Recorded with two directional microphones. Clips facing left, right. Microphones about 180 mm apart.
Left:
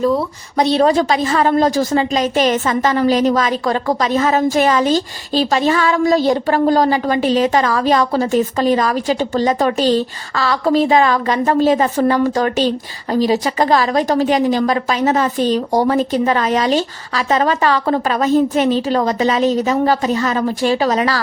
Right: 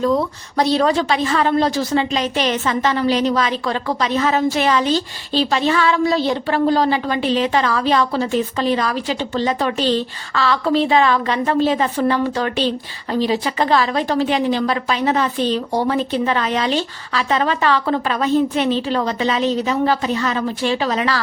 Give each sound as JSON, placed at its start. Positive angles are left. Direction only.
{"t": 0.6, "sound": "a woman's voice", "side_deg": 25}
{"t": 0.9, "sound": "a woman's voice", "side_deg": 40}